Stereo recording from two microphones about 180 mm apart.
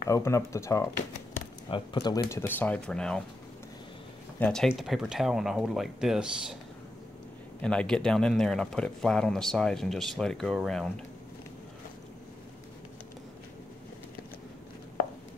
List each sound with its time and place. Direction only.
0.0 s speech: 15° left (ahead or behind)
4.4 s a man's voice: 5° left (ahead or behind)
7.6 s a man's voice: 5° left (ahead or behind)